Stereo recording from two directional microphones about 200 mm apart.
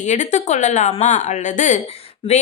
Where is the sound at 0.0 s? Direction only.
35° left (ahead or behind).